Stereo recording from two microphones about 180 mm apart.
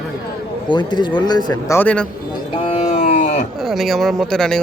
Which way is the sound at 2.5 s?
30° left (ahead or behind).